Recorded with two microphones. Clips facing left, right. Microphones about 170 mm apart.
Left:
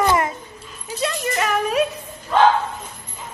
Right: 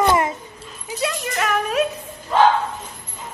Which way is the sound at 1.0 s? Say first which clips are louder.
Left 1 dB; centre (ahead or behind).